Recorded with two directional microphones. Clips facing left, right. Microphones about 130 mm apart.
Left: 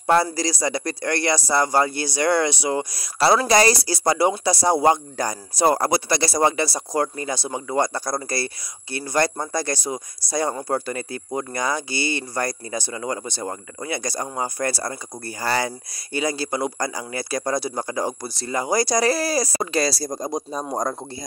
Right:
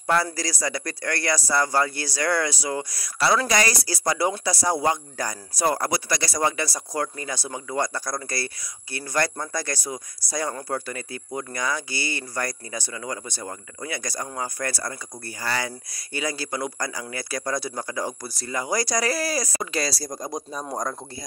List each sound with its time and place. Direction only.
0.0 s speech: 25° left (ahead or behind)